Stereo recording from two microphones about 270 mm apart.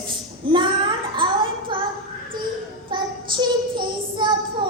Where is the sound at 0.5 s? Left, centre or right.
Centre.